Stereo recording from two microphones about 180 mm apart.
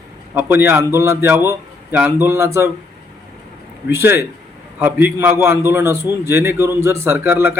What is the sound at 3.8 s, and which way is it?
A man's voice, 15° right (ahead or behind).